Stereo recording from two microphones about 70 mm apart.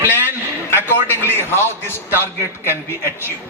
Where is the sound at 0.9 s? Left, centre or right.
Left.